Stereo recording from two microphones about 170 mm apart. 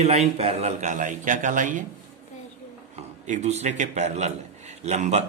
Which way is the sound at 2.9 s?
40° right (ahead or behind).